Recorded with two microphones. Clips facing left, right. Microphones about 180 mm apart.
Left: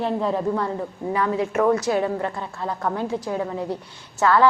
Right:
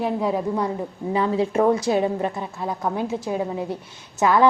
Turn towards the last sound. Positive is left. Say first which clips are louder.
# even
turn(degrees=-15)  # may be behind; listen again after turning